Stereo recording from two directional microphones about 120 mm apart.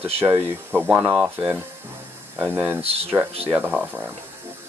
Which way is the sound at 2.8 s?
60° right (ahead or behind).